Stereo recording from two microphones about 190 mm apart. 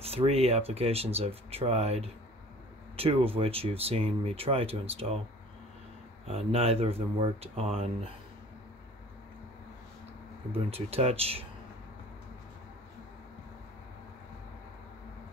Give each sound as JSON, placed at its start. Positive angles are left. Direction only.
{"t": 0.0, "sound": "speech", "side_deg": -30}
{"t": 6.2, "sound": "speech", "side_deg": -30}
{"t": 10.5, "sound": "speech", "side_deg": -30}